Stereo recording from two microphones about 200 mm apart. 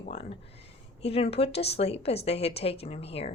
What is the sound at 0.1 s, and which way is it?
A woman's voice, 30° left (ahead or behind).